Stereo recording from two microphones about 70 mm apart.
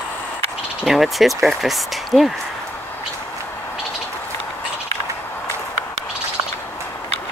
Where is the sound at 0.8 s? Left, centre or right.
Centre.